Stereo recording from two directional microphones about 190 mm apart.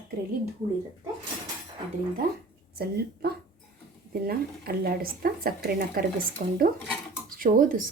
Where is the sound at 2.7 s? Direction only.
55° right (ahead or behind).